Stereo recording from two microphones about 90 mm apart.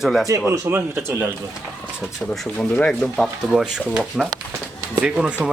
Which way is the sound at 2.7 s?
15° left (ahead or behind).